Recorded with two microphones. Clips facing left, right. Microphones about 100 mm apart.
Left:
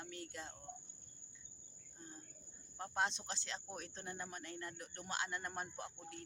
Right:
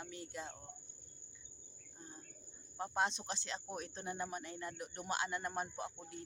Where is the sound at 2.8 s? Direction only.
10° right (ahead or behind).